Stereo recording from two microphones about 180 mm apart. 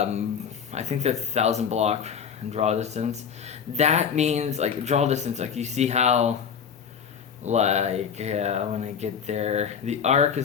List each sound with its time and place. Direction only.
0.7 s speech: 40° right (ahead or behind)
7.4 s speech: 40° right (ahead or behind)